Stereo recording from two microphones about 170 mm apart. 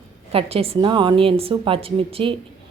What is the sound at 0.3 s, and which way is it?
A woman's voice, 35° right (ahead or behind).